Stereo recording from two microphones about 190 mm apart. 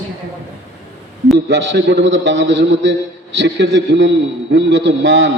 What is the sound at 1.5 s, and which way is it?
A man's voice, 65° right (ahead or behind).